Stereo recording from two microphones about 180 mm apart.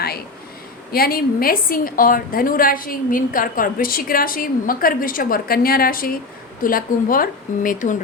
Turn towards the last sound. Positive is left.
turn(degrees=45)  # may be behind; listen again after turning